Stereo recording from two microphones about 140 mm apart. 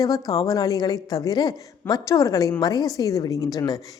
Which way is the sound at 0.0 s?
25° left (ahead or behind).